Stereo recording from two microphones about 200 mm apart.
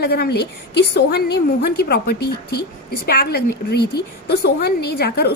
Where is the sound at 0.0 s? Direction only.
55° left (ahead or behind).